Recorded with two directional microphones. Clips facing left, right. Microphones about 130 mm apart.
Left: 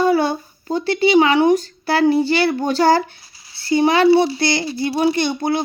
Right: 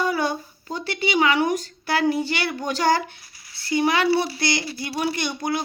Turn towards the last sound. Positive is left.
turn(degrees=25)  # may be behind; listen again after turning